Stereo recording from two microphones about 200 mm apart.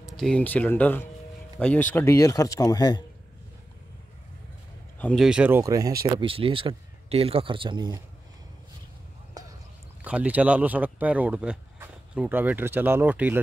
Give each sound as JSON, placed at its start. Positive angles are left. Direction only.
{"t": 0.1, "sound": "speech", "side_deg": 5}
{"t": 4.9, "sound": "speech", "side_deg": 5}
{"t": 6.1, "sound": "speech", "side_deg": -25}
{"t": 9.4, "sound": "clip-clop", "side_deg": -20}
{"t": 10.0, "sound": "speech", "side_deg": -5}